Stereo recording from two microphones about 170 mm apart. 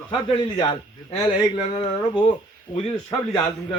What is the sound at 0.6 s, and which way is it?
Speech, 25° left (ahead or behind).